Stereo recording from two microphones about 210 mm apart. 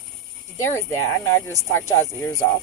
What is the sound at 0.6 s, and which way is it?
Speech, 10° left (ahead or behind).